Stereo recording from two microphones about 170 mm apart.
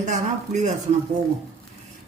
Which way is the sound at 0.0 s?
45° right (ahead or behind).